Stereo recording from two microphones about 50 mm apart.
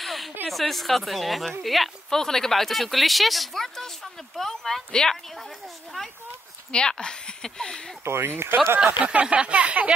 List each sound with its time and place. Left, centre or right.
0.0 s a sound: centre
0.5 s speech: centre
6.7 s speech: centre
8.0 s speech: right
9.0 s speech: right